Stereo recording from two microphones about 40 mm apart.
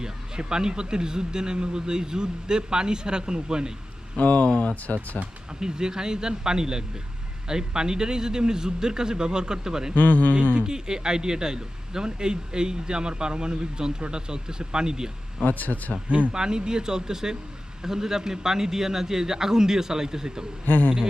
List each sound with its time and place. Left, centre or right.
0.0 s speech: centre
4.2 s speech: left
4.4 s speech: left
5.5 s a man's voice: centre
9.9 s a man's voice: left
10.5 s speech: right
15.4 s a man's voice: left
16.0 s speech: right
16.3 s a man's voice: centre
20.7 s a man's voice: left